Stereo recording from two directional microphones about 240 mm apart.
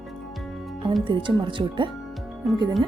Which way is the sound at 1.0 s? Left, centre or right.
Centre.